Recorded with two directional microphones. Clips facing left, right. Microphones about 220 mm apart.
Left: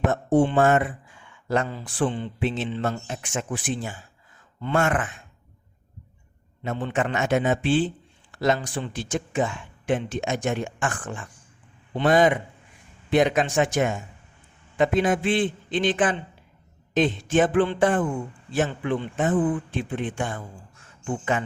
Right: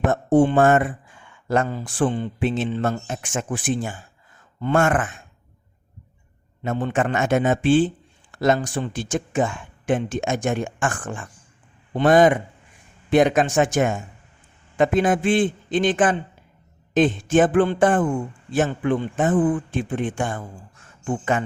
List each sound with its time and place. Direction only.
0.1 s speech: 45° right (ahead or behind)
6.6 s speech: 45° right (ahead or behind)